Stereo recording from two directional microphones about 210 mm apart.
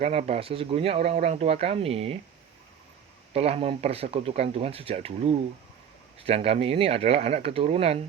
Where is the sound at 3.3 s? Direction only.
30° right (ahead or behind).